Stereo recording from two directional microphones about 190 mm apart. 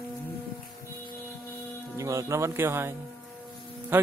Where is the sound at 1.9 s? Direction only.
15° right (ahead or behind).